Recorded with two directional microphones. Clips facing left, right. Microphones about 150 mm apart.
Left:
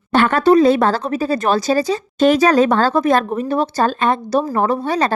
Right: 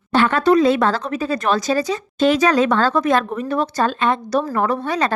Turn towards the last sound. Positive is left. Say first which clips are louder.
# left 2 dB
turn(degrees=35)  # may be behind; listen again after turning